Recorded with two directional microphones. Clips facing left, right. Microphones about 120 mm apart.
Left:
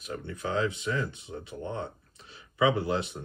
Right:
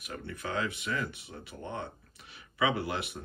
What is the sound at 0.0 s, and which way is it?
Speech, 20° left (ahead or behind).